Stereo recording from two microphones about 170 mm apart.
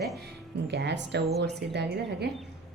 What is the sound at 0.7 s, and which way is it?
Speech, 80° right.